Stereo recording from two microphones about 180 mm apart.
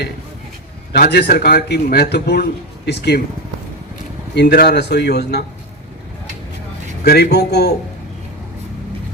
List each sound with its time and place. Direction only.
0.9 s a man's voice: 60° left (ahead or behind)
4.4 s a man's voice: 65° left (ahead or behind)
7.0 s a man's voice: 60° left (ahead or behind)